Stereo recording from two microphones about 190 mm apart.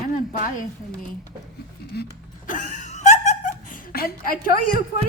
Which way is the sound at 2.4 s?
45° left (ahead or behind).